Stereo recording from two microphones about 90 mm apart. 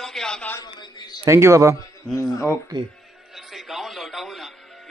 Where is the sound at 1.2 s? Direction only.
30° right (ahead or behind).